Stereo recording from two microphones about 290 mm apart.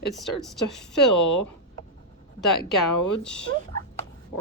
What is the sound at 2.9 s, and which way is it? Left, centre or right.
Speech, left.